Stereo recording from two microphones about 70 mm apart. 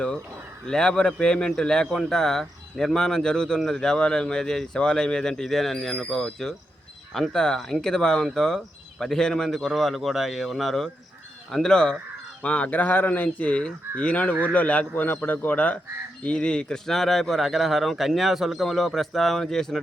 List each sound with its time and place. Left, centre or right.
0.7 s speech: centre